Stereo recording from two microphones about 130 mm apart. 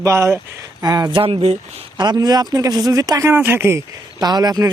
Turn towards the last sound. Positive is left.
turn(degrees=-30)  # may be behind; listen again after turning